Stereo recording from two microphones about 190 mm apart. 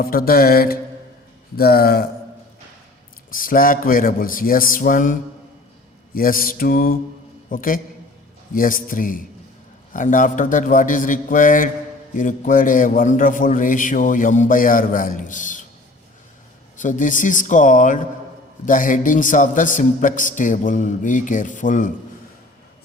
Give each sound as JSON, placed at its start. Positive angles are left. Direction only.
{"t": 0.0, "sound": "a man's voice", "side_deg": 50}
{"t": 3.2, "sound": "a man's voice", "side_deg": 45}
{"t": 6.1, "sound": "a man's voice", "side_deg": 50}
{"t": 16.7, "sound": "a man's voice", "side_deg": 40}